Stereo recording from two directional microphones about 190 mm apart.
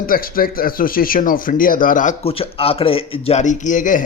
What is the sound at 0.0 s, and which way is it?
A man's voice, 50° left (ahead or behind).